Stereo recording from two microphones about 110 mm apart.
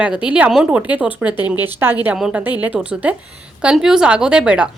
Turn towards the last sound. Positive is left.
turn(degrees=-10)  # may be behind; listen again after turning